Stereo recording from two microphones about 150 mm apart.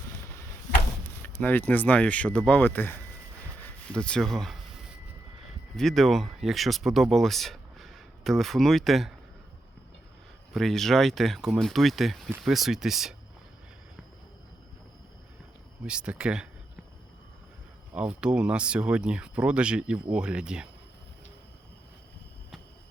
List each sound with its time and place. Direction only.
1.2 s speech: 10° left (ahead or behind)
5.7 s speech: centre (ahead or behind)
10.5 s speech: centre (ahead or behind)
15.9 s speech: 5° right (ahead or behind)
17.9 s speech: 10° right (ahead or behind)